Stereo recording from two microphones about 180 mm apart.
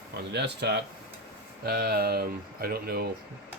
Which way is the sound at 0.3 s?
70° right (ahead or behind).